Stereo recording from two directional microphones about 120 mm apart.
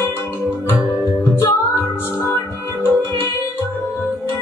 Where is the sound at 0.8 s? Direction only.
Centre (ahead or behind).